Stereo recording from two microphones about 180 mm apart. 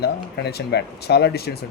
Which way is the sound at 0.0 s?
65° left (ahead or behind).